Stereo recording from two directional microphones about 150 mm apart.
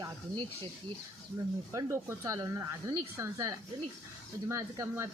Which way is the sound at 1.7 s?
20° right (ahead or behind).